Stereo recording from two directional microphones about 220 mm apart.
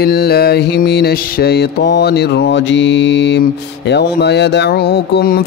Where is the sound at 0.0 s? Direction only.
45° left (ahead or behind).